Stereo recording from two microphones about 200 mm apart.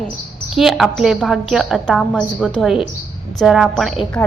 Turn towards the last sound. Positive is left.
turn(degrees=0)  # may be behind; listen again after turning